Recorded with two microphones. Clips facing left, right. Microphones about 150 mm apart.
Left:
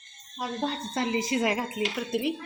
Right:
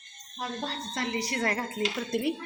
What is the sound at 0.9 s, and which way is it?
Speech, 20° left (ahead or behind).